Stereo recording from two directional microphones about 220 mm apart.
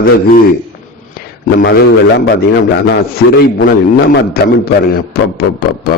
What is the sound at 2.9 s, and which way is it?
Speech, 45° left (ahead or behind).